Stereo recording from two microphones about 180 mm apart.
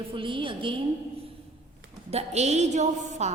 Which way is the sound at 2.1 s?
35° right (ahead or behind).